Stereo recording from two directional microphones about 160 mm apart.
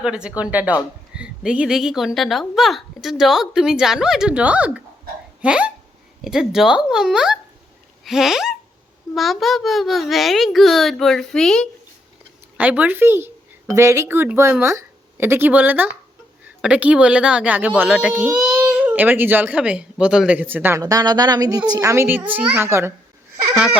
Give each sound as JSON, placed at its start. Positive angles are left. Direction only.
{"t": 0.0, "sound": "a woman's voice", "side_deg": -5}
{"t": 8.0, "sound": "hiccup", "side_deg": 0}
{"t": 9.1, "sound": "a woman's voice", "side_deg": 0}
{"t": 12.5, "sound": "speech", "side_deg": -10}
{"t": 18.3, "sound": "speech", "side_deg": -20}
{"t": 18.6, "sound": "speech", "side_deg": -5}